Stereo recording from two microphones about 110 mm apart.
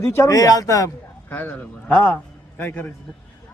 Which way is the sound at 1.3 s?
15° left (ahead or behind).